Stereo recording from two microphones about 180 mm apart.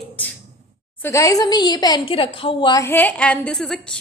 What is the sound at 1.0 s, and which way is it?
Speech, 15° left (ahead or behind).